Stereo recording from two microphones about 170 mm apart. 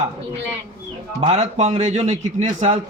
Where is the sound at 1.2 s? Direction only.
40° right (ahead or behind).